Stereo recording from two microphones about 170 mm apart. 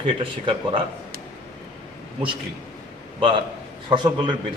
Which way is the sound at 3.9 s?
25° right (ahead or behind).